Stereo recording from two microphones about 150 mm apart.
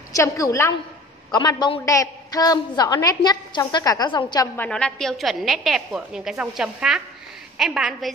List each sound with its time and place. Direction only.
0.1 s a woman's voice: 20° left (ahead or behind)
4.6 s a woman's voice: 5° left (ahead or behind)